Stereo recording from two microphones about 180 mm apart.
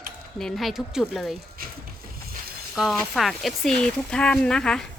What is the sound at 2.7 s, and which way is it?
Speech, centre (ahead or behind).